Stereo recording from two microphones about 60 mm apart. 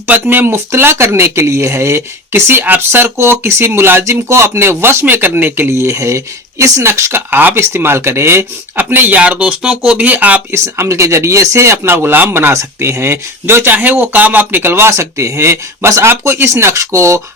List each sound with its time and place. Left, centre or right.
0.1 s speech: right
0.5 s speech: right
4.0 s speech: right
5.7 s speech: right
8.8 s speech: right
9.1 s speech: right
10.5 s speech: right
14.9 s speech: right
16.8 s speech: right